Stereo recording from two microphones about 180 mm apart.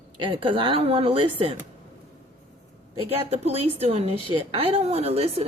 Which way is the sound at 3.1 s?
35° right (ahead or behind).